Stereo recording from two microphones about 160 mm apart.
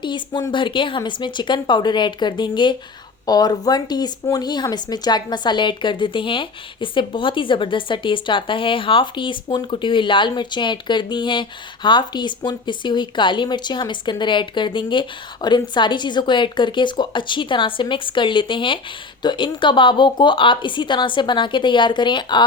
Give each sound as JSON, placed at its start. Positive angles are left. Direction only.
{"t": 0.0, "sound": "speech", "side_deg": 25}